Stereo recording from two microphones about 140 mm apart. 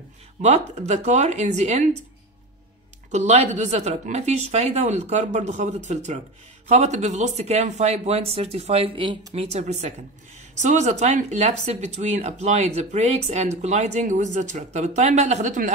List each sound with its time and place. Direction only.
0.4 s a woman's voice: 55° right (ahead or behind)
3.1 s a woman's voice: 55° right (ahead or behind)